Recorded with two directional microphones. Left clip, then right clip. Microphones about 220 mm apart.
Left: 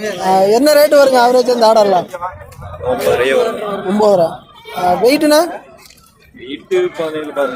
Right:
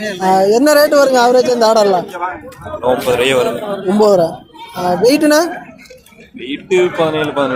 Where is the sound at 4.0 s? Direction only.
10° right (ahead or behind).